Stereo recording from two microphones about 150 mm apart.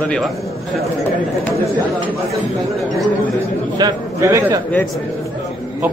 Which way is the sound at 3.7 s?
25° right (ahead or behind).